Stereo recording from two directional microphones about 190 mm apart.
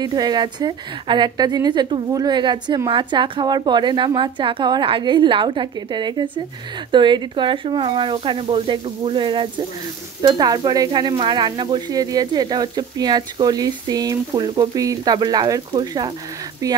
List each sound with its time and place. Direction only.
0.0 s a woman's voice: 20° right (ahead or behind)